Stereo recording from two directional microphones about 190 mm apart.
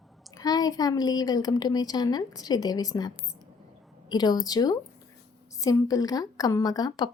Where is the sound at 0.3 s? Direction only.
20° left (ahead or behind).